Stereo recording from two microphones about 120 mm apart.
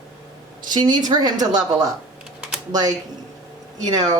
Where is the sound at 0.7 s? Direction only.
35° right (ahead or behind).